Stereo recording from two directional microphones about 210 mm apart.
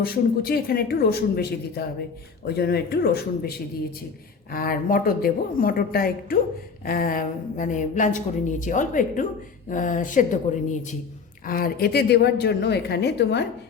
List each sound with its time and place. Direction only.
0.0 s a woman's voice: 45° left (ahead or behind)
4.5 s a woman's voice: 45° left (ahead or behind)